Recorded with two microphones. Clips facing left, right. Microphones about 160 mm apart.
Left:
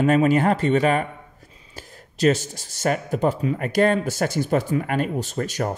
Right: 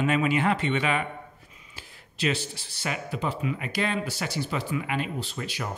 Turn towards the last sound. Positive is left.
turn(degrees=45)  # may be behind; listen again after turning